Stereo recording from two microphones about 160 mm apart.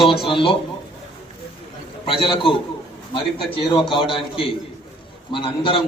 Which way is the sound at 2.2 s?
35° left (ahead or behind).